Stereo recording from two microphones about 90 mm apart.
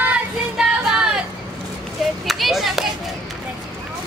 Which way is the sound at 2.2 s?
Centre (ahead or behind).